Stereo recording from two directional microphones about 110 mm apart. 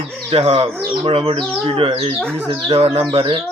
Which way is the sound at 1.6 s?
55° right (ahead or behind).